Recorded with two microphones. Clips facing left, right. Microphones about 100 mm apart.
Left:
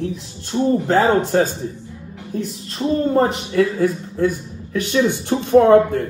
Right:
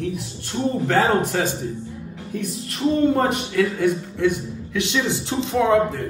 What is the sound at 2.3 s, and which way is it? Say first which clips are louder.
A woman's voice: left 2 dB; 30° left (ahead or behind).